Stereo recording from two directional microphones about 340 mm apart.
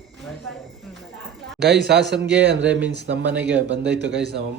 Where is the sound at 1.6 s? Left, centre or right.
Right.